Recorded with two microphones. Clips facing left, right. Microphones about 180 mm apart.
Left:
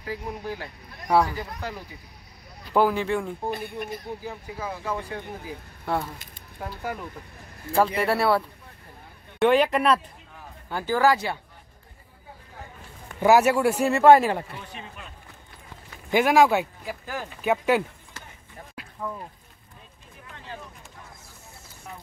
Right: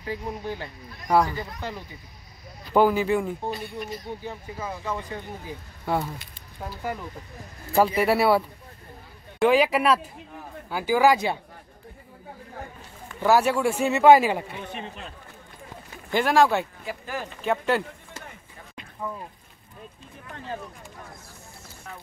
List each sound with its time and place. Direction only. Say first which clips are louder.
0.0 s speech: right 1 dB; 5° left (ahead or behind)
3.5 s speech: left 1 dB; 55° left (ahead or behind)
4.2 s speech: even; 5° left (ahead or behind)
5.1 s speech: left 1 dB; centre (ahead or behind)
13.2 s speech: left 2 dB; 10° left (ahead or behind)
14.7 s speech: right 5 dB; 20° right (ahead or behind)
16.1 s speech: left 2 dB; 10° left (ahead or behind)
18.9 s speech: even; centre (ahead or behind)